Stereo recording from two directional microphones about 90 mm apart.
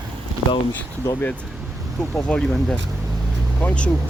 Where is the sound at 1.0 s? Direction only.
30° left (ahead or behind).